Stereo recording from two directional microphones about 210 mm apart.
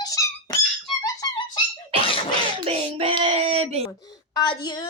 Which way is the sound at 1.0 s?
20° left (ahead or behind).